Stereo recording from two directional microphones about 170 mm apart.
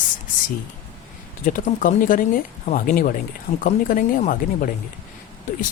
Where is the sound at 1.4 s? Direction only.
50° left (ahead or behind).